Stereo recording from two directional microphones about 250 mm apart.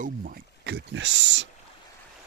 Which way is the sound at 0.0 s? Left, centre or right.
Right.